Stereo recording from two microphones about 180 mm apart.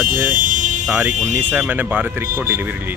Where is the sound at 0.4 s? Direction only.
45° right (ahead or behind).